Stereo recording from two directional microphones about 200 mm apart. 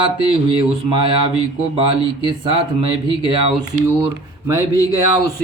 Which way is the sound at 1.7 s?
25° right (ahead or behind).